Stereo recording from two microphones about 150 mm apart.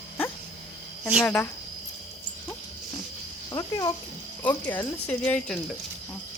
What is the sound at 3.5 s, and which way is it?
Speech, 25° left (ahead or behind).